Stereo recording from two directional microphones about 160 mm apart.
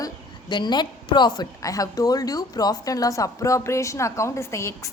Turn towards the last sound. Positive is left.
turn(degrees=20)  # may be behind; listen again after turning